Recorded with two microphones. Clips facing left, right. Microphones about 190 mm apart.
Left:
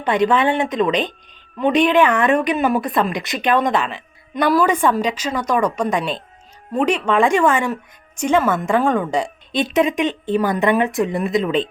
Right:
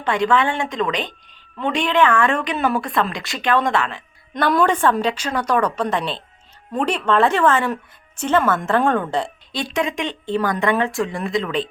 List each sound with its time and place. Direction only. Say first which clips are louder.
0.0 s a woman's voice: left 2 dB; 20° left (ahead or behind)